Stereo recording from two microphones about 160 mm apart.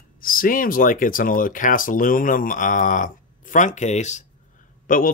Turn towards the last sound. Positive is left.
turn(degrees=60)  # may be behind; listen again after turning